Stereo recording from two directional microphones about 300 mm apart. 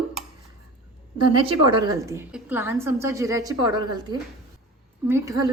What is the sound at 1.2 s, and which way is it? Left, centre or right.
A woman's voice, centre.